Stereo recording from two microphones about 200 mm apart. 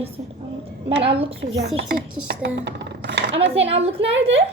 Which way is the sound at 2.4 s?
60° right (ahead or behind).